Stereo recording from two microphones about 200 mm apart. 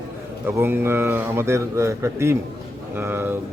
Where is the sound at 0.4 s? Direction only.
10° right (ahead or behind).